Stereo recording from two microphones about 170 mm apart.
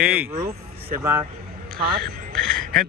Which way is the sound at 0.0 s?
10° right (ahead or behind).